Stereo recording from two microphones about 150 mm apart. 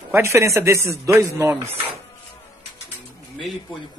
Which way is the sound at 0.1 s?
15° right (ahead or behind).